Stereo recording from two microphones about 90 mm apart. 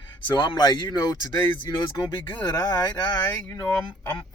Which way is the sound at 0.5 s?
55° left (ahead or behind).